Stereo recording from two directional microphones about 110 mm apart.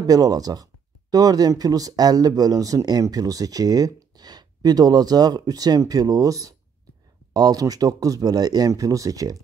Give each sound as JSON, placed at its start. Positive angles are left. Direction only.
{"t": 0.0, "sound": "speech", "side_deg": -35}